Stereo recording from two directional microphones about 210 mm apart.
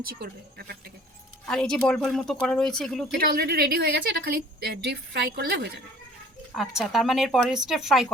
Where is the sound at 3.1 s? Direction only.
45° right (ahead or behind).